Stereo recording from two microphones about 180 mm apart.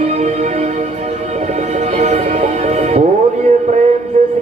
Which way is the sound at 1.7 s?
40° right (ahead or behind).